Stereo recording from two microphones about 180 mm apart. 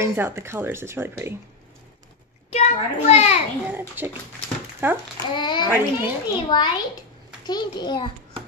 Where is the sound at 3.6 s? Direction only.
10° right (ahead or behind).